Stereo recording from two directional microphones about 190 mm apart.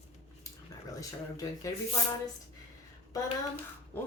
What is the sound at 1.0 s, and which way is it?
Speech, 20° left (ahead or behind).